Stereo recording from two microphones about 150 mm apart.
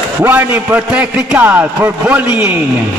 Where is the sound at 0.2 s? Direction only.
10° right (ahead or behind).